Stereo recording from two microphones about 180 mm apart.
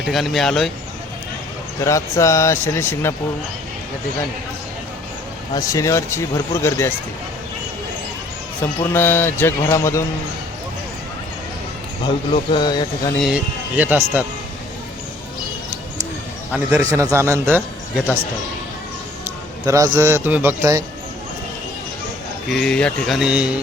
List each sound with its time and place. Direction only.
0.0 s speech: centre (ahead or behind)
1.8 s a man's voice: 15° left (ahead or behind)
5.5 s a man's voice: 15° left (ahead or behind)
8.6 s a man's voice: 15° left (ahead or behind)
12.0 s speech: 30° left (ahead or behind)
13.1 s a man's voice: 5° right (ahead or behind)
16.5 s a man's voice: 10° right (ahead or behind)
19.6 s a man's voice: 20° right (ahead or behind)
22.4 s speech: centre (ahead or behind)